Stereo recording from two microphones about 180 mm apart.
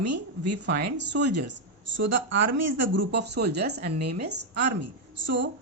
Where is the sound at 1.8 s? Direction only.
90° right; by 4.6 s 70° right (ahead or behind).